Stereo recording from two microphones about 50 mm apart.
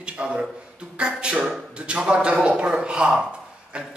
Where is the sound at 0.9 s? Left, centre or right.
Centre.